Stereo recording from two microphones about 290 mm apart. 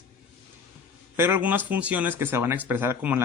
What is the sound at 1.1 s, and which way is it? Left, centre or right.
Speech, centre.